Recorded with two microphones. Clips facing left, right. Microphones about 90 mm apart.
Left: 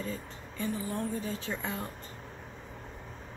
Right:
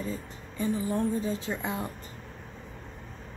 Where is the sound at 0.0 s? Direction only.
20° right (ahead or behind).